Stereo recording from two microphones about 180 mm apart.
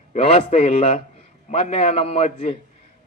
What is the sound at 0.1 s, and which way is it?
A man's voice, 35° left (ahead or behind).